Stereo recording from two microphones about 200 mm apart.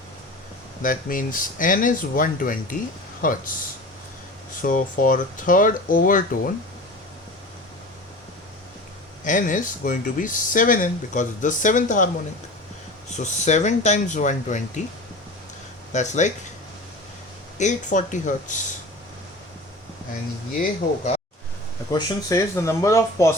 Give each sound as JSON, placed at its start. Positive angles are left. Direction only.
{"t": 0.8, "sound": "speech", "side_deg": 45}
{"t": 4.6, "sound": "speech", "side_deg": 40}
{"t": 9.2, "sound": "speech", "side_deg": 40}
{"t": 13.1, "sound": "speech", "side_deg": 35}
{"t": 15.9, "sound": "speech", "side_deg": 35}
{"t": 17.6, "sound": "speech", "side_deg": 40}
{"t": 20.6, "sound": "speech", "side_deg": 35}
{"t": 21.9, "sound": "speech", "side_deg": 15}